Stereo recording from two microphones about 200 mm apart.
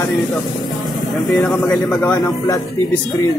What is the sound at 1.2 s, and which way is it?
Speech, centre (ahead or behind).